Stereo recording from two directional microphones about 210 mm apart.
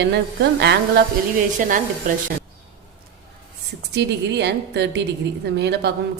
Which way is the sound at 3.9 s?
55° right (ahead or behind).